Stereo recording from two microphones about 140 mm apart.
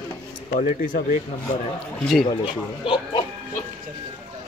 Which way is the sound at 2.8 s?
35° left (ahead or behind).